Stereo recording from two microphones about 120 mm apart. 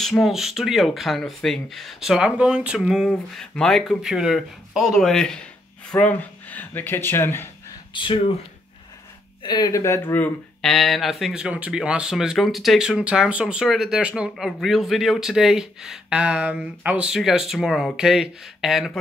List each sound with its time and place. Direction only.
0.0 s speech: centre (ahead or behind); by 7.4 s 20° left (ahead or behind)
7.9 s speech: 40° left (ahead or behind)
9.4 s speech: 35° left (ahead or behind)
9.8 s speech: 25° left (ahead or behind)
10.6 s speech: centre (ahead or behind)